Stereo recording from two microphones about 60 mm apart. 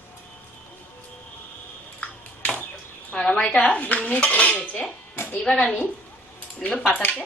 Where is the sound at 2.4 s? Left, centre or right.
Left.